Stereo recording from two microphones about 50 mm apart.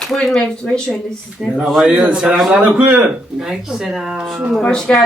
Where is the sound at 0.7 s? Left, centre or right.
Left.